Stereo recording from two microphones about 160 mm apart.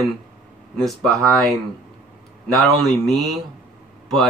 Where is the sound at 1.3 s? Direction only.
Centre (ahead or behind).